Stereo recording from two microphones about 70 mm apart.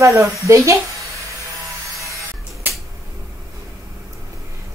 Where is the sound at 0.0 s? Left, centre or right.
Right.